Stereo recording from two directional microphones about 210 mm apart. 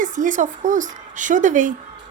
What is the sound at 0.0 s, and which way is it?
A woman's voice, 35° right (ahead or behind).